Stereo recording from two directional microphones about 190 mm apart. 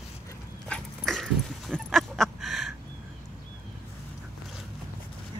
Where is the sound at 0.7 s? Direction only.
Centre (ahead or behind).